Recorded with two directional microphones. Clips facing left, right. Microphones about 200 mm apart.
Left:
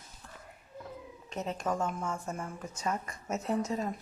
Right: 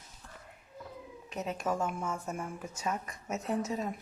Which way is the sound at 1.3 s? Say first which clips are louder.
Even; 5° right (ahead or behind).